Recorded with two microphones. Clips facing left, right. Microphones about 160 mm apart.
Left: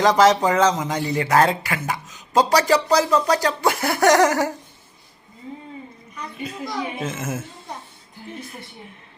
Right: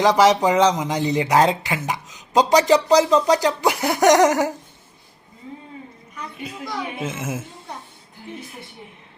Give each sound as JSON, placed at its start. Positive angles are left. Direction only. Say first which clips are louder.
{"t": 0.0, "sound": "speech", "louder": "even", "side_deg": -15}
{"t": 6.4, "sound": "speech", "louder": "left 2 dB", "side_deg": -5}